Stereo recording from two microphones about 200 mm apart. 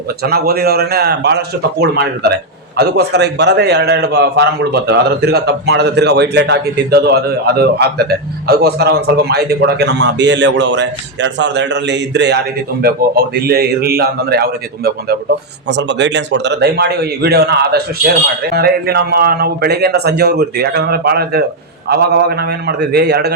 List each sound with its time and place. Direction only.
0.2 s a man's voice: 50° right (ahead or behind)
15.7 s a man's voice: 60° right (ahead or behind)